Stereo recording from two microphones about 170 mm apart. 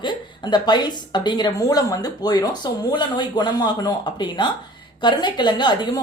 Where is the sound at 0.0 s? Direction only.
25° left (ahead or behind).